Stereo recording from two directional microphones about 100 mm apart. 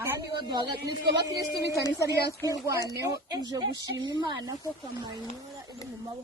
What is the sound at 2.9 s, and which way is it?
Speech, 35° right (ahead or behind).